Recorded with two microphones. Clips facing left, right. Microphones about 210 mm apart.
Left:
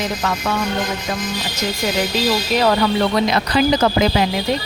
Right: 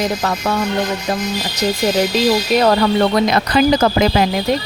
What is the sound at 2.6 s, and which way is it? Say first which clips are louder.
Speech: right 1 dB; 45° right (ahead or behind).